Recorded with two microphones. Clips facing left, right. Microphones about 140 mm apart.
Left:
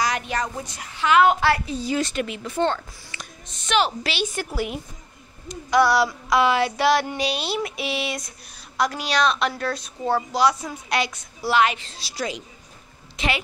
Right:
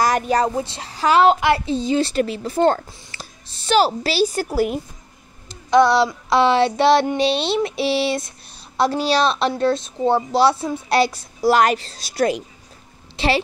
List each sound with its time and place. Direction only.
0.0 s a woman's voice: 45° right (ahead or behind)
5.5 s child singing: 25° right (ahead or behind)
8.7 s a woman's voice: 30° right (ahead or behind)
12.1 s a woman's voice: 55° right (ahead or behind)
13.1 s a woman's voice: 30° right (ahead or behind)